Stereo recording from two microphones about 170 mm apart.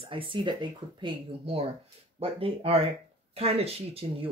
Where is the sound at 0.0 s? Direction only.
30° right (ahead or behind).